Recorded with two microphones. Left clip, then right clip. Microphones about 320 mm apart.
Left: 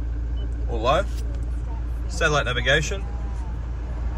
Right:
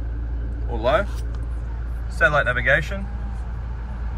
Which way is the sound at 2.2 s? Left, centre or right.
Centre.